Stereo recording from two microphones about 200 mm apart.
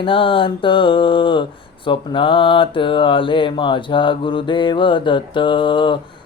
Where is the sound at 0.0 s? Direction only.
25° left (ahead or behind).